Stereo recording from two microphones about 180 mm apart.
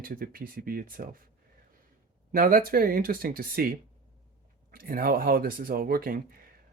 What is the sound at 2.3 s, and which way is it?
Speech, 55° right (ahead or behind).